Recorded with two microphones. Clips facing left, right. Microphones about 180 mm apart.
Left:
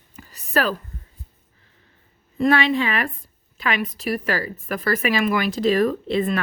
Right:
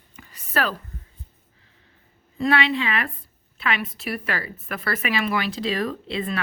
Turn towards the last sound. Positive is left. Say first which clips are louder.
# left 6 dB
turn(degrees=45)  # may be behind; listen again after turning